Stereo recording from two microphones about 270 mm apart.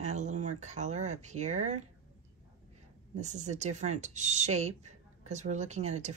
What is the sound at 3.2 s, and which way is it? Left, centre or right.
Speech, right.